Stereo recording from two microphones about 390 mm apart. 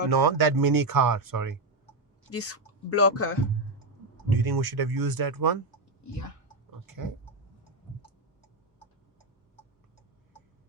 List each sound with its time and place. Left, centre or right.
0.1 s speech: right
2.3 s speech: left
4.3 s speech: right
6.0 s speech: left
6.7 s a sound: right